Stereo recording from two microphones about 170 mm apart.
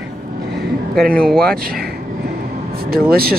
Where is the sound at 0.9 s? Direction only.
5° left (ahead or behind).